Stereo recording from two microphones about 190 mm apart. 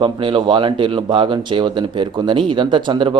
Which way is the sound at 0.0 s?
25° right (ahead or behind).